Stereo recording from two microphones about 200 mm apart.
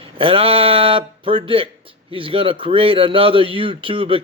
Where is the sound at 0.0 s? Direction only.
30° right (ahead or behind).